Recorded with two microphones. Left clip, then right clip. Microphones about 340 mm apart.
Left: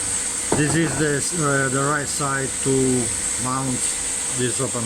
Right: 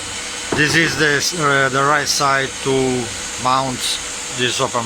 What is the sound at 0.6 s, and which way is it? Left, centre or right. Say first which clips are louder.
Speech: right 9 dB; centre.